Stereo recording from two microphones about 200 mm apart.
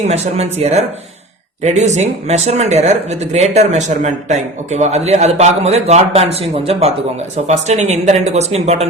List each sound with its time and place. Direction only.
0.0 s speech: 35° right (ahead or behind)